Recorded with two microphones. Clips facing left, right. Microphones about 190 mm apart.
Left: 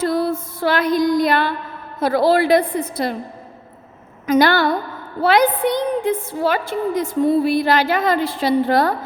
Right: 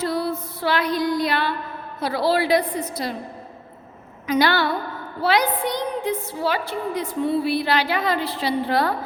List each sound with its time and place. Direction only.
0.0 s female singing: 50° left (ahead or behind)
2.0 s a woman's voice: 50° left (ahead or behind)
4.3 s a woman's voice: 45° left (ahead or behind)